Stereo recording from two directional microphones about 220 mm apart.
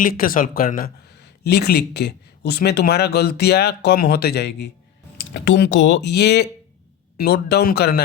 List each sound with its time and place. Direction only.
0.0 s speech: 40° left (ahead or behind)